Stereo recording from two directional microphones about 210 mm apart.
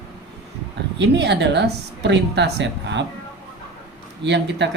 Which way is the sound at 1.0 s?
55° right (ahead or behind).